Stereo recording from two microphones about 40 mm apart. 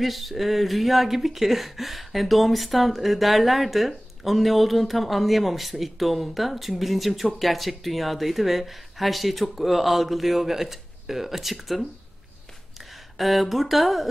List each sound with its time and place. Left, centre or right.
0.0 s speech: centre